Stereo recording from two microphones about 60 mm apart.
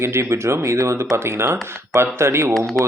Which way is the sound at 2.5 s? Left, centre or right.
Centre.